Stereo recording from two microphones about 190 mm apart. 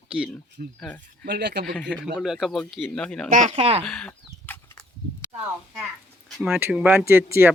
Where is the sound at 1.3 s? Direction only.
60° right (ahead or behind).